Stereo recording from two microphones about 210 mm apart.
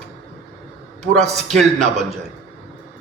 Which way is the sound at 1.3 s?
Centre (ahead or behind).